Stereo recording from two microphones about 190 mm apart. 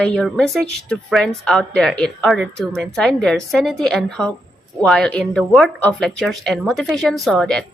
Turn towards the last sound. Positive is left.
turn(degrees=5)  # may be behind; listen again after turning